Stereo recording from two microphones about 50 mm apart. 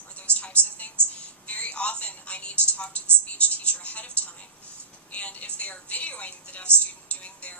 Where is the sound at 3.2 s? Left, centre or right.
Left.